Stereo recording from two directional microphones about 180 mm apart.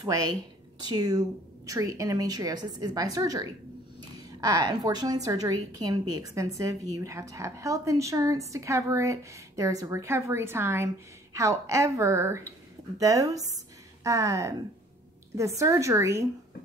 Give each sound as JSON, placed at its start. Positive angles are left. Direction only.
{"t": 0.0, "sound": "a woman's voice", "side_deg": -25}